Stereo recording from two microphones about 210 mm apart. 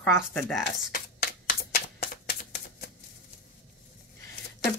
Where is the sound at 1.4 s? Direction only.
45° left (ahead or behind).